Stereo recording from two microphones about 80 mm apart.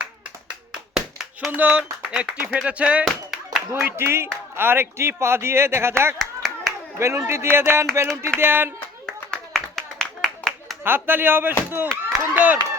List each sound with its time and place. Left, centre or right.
0.0 s clapping: centre
1.5 s speech: centre
3.0 s clapping: centre
3.7 s speech: right
6.1 s clapping: centre
7.0 s speech: right
9.0 s clapping: centre
10.8 s speech: right